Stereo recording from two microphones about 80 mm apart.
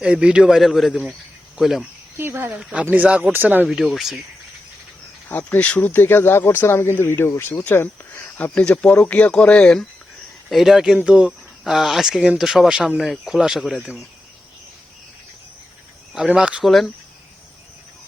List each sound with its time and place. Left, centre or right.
0.0 s speech: centre
2.1 s speech: right
3.7 s speech: centre
5.3 s speech: centre
10.5 s speech: centre
16.1 s speech: centre
16.6 s speech: centre